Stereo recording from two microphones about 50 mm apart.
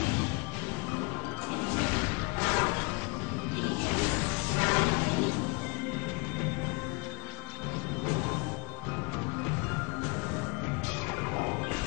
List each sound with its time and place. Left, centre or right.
1.6 s music: centre